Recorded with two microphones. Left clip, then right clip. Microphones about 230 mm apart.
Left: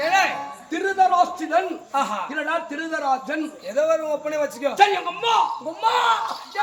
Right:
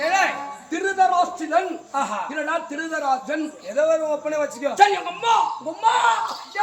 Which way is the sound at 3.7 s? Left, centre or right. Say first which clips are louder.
Right 1 dB; left.